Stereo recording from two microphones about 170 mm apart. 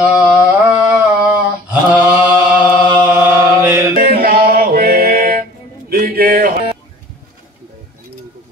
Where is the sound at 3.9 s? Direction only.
60° right (ahead or behind).